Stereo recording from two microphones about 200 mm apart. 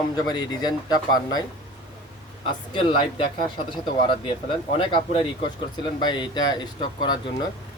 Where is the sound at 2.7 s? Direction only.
25° left (ahead or behind).